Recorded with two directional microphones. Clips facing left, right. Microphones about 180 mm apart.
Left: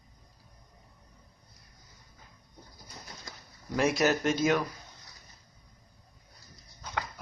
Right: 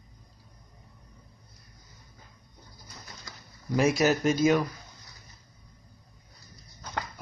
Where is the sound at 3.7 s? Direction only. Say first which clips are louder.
Right 3 dB; 5° right (ahead or behind).